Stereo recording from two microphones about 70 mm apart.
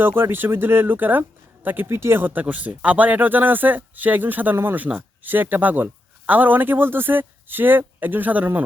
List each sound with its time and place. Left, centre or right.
0.0 s a man's voice: right